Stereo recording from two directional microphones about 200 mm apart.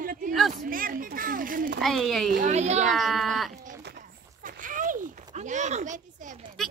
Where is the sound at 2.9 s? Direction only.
Centre (ahead or behind).